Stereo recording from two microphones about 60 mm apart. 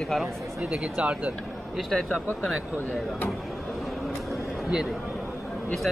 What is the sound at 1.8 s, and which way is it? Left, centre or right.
Speech, centre.